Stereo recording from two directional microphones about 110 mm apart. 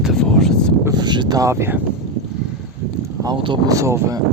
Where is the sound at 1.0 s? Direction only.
40° right (ahead or behind); by 1.8 s 25° right (ahead or behind).